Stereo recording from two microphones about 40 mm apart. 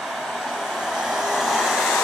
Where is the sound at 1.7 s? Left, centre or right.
Centre.